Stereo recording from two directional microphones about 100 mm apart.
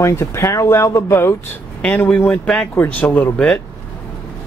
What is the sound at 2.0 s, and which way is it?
Speech, 15° left (ahead or behind).